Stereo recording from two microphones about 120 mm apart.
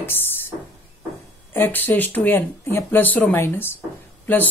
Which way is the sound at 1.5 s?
15° left (ahead or behind).